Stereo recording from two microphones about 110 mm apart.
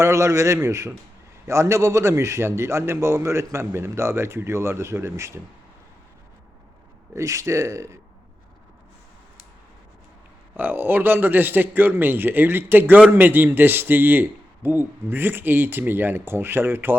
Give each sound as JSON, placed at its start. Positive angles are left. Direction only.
{"t": 0.0, "sound": "a man's voice", "side_deg": -25}
{"t": 7.2, "sound": "a man's voice", "side_deg": -30}
{"t": 10.6, "sound": "a man's voice", "side_deg": -20}